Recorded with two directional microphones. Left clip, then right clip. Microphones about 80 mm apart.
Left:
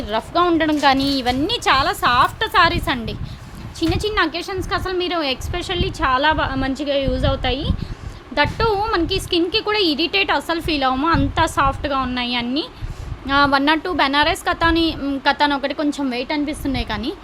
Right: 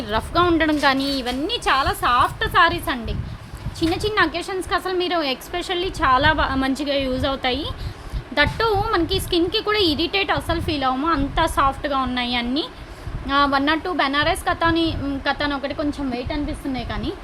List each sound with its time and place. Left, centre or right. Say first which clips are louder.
0.1 s a woman's voice: left 1 dB; centre
0.9 s a woman's voice: left 3 dB; left
1.2 s a woman's voice: left 4 dB; left
3.8 s a woman's voice: even; left
10.3 s a woman's voice: left 3 dB; left
11.4 s a woman's voice: left 1 dB; left
13.2 s a woman's voice: left 3 dB; left
16.9 s speech: left 4 dB; left